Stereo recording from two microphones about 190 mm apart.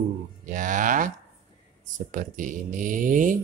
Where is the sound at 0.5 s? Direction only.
40° right (ahead or behind).